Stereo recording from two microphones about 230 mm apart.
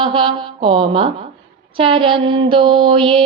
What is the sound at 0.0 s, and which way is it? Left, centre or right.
A woman's voice, right.